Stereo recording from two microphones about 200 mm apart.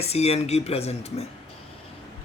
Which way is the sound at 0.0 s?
30° left (ahead or behind).